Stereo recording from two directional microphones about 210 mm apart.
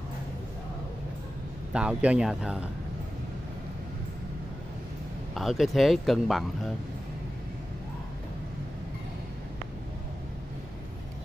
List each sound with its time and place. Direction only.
1.7 s speech: 5° right (ahead or behind)
5.3 s speech: centre (ahead or behind)